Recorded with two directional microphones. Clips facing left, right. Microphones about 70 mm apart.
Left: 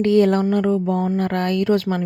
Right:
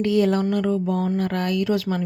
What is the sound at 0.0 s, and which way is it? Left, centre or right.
A woman's voice, left.